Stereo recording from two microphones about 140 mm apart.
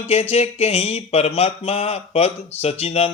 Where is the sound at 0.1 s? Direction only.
45° left (ahead or behind).